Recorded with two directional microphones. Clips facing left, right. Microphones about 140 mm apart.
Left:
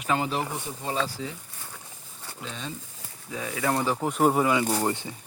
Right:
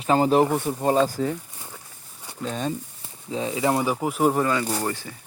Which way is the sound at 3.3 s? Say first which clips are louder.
Right 5 dB; 25° right (ahead or behind).